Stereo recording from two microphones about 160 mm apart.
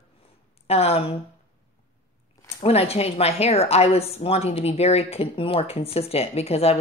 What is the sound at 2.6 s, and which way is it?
Speech, 40° left (ahead or behind).